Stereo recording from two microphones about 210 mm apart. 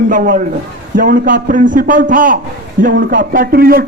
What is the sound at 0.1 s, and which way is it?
A man's voice, 40° right (ahead or behind).